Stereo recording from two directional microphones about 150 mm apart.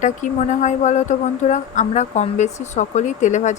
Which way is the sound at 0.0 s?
55° left (ahead or behind).